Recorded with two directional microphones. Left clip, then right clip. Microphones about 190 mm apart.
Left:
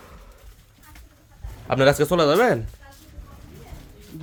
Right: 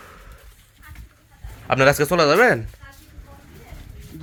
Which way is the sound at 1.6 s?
Centre (ahead or behind).